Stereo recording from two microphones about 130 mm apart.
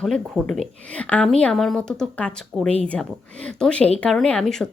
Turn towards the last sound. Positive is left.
turn(degrees=5)  # may be behind; listen again after turning